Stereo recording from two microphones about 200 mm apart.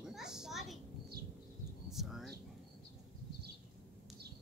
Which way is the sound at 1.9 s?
Centre (ahead or behind).